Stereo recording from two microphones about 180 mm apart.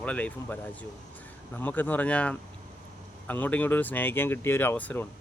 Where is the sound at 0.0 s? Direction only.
10° left (ahead or behind).